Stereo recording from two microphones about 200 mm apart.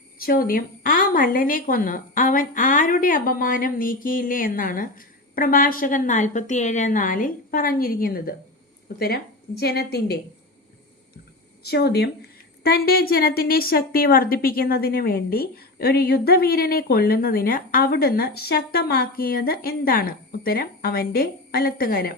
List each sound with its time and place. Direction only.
0.2 s a woman's voice: 45° left (ahead or behind)
11.6 s a woman's voice: 55° left (ahead or behind)